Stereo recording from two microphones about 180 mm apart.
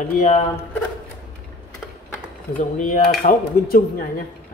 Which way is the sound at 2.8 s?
50° left (ahead or behind).